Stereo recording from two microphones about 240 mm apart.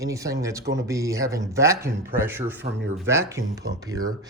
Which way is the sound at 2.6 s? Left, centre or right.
Right.